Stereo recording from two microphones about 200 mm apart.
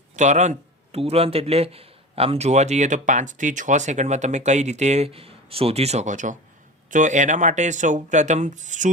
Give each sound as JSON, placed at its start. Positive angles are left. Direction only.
{"t": 0.2, "sound": "speech", "side_deg": -35}